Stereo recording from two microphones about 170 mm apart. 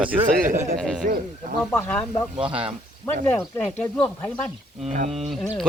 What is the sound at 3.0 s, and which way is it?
Speech, 15° left (ahead or behind).